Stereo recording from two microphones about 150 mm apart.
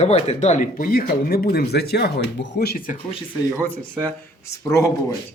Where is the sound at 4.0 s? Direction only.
20° left (ahead or behind).